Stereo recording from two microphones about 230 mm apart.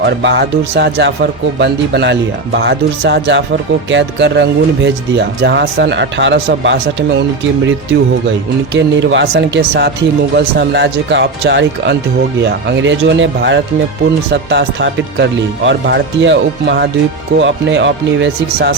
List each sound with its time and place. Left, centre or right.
0.0 s speech: right
8.7 s speech: right